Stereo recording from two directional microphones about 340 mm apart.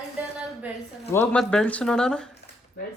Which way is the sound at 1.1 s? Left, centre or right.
Centre.